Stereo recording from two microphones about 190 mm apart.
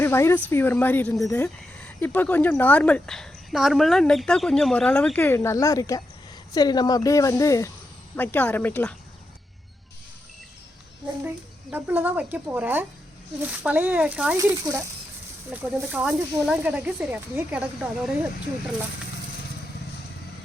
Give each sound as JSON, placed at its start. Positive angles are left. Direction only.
{"t": 0.0, "sound": "speech", "side_deg": 15}
{"t": 11.7, "sound": "speech", "side_deg": -10}